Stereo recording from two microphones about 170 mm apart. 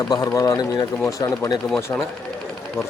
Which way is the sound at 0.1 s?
20° left (ahead or behind).